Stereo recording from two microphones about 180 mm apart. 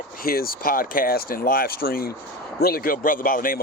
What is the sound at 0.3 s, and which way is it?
Speech, 55° left (ahead or behind).